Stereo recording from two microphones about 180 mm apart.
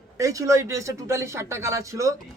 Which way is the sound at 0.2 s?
20° right (ahead or behind).